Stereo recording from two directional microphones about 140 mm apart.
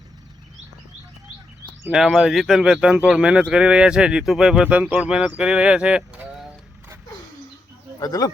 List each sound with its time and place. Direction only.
1.9 s speech: 5° right (ahead or behind)
7.9 s speech: 25° left (ahead or behind)